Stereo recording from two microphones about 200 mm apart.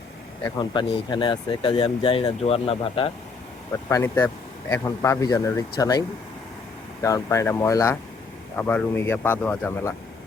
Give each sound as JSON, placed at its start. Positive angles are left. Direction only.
{"t": 0.4, "sound": "speech", "side_deg": 25}
{"t": 3.8, "sound": "speech", "side_deg": 15}